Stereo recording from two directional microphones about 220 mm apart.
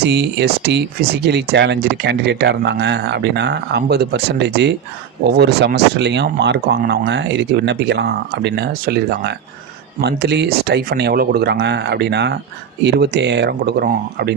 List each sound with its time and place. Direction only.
0.0 s speech: 50° right (ahead or behind)